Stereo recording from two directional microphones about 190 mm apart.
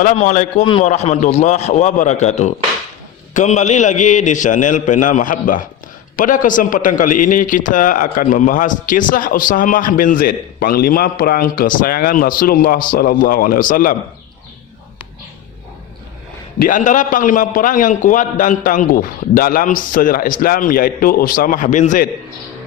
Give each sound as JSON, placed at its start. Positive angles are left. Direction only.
{"t": 0.0, "sound": "a man's voice", "side_deg": 40}
{"t": 16.6, "sound": "a man's voice", "side_deg": 45}